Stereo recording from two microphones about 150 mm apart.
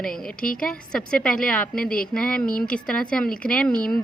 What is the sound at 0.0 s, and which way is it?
A woman's voice, 5° left (ahead or behind).